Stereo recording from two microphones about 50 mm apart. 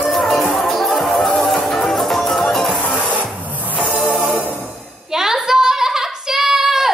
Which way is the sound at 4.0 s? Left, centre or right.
Centre.